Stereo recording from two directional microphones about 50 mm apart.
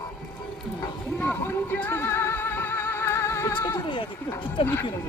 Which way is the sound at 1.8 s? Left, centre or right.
Left.